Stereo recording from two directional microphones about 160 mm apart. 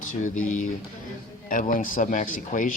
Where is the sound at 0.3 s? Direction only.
50° left (ahead or behind).